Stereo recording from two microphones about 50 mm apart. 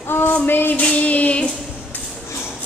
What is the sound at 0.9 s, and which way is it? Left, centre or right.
Female singing, left.